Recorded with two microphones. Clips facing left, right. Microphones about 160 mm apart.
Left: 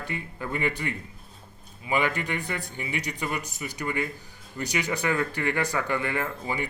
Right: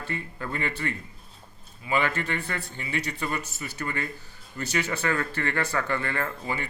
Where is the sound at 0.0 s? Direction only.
15° left (ahead or behind).